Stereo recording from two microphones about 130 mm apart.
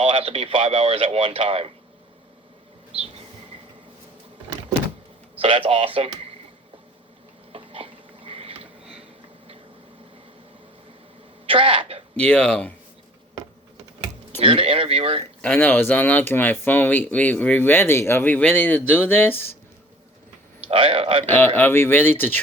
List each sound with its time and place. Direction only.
0.0 s speech: 45° right (ahead or behind)
5.4 s speech: 45° right (ahead or behind)
7.5 s a sound: 45° right (ahead or behind)
11.4 s speech: 40° right (ahead or behind)
12.1 s speech: 10° left (ahead or behind)
14.3 s speech: 45° right (ahead or behind)
15.4 s speech: 10° left (ahead or behind)
20.7 s speech: 45° right (ahead or behind)
21.3 s speech: 15° left (ahead or behind)